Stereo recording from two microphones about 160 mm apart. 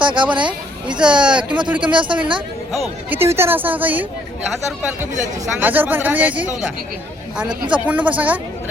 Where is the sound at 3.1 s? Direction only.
15° right (ahead or behind).